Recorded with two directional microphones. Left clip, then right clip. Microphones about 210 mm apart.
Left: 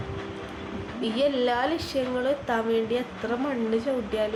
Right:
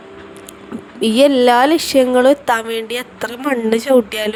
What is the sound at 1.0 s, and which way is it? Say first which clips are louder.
A woman's voice: right 13 dB; 55° right (ahead or behind).